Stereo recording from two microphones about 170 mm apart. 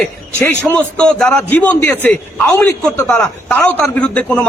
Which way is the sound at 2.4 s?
20° left (ahead or behind).